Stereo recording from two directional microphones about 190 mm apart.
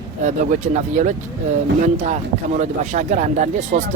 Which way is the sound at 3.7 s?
50° right (ahead or behind).